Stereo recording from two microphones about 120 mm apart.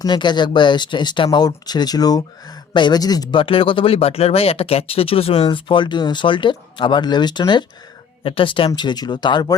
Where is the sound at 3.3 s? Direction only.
50° left (ahead or behind).